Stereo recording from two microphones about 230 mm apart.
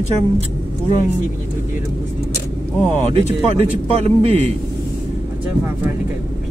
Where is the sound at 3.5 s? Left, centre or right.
Right.